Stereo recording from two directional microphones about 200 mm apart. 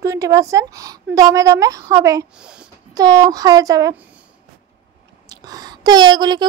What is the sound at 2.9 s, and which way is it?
A woman's voice, 20° right (ahead or behind).